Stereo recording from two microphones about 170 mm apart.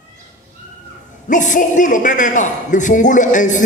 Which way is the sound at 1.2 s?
50° left (ahead or behind).